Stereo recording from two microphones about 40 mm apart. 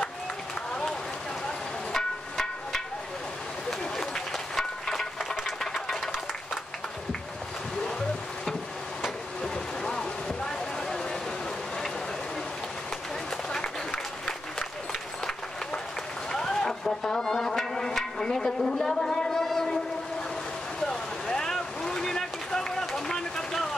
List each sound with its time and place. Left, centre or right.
1.9 s music: centre
3.9 s a sound: centre
5.6 s sewing machine: centre
9.4 s a sound: centre
16.3 s music: centre
18.8 s a sound: centre
19.4 s train: centre
20.8 s vehicle: centre
21.5 s boat: centre